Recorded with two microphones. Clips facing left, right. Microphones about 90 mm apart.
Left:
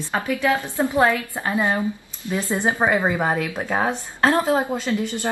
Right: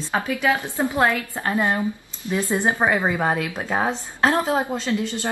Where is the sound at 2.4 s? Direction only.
15° right (ahead or behind).